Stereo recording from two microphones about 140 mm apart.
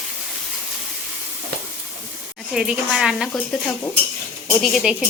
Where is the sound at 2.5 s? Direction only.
5° right (ahead or behind).